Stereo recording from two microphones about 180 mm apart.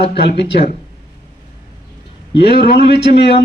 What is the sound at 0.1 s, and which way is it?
Speech, 70° left (ahead or behind).